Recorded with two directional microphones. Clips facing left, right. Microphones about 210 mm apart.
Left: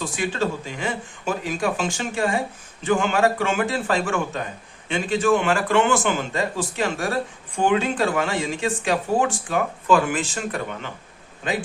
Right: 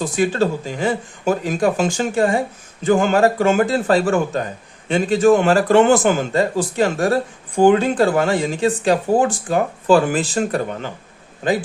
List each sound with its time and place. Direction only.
0.2 s a man's voice: 40° right (ahead or behind)